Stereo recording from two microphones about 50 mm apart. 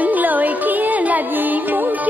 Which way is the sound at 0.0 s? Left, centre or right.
Right.